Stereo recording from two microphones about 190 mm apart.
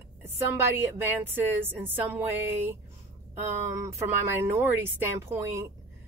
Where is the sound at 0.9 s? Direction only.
10° right (ahead or behind).